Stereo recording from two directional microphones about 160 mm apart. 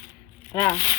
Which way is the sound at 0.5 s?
15° left (ahead or behind).